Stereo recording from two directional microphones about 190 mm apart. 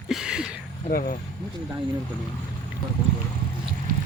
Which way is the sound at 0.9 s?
50° left (ahead or behind).